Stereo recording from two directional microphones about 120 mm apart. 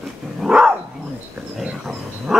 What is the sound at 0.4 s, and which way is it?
Dog, 5° right (ahead or behind).